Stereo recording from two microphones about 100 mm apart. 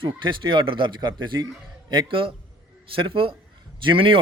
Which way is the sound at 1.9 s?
55° right (ahead or behind).